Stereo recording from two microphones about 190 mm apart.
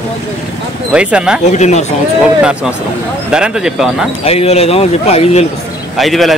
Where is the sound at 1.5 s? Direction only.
35° left (ahead or behind).